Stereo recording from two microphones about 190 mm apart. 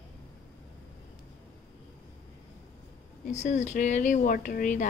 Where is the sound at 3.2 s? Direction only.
35° left (ahead or behind).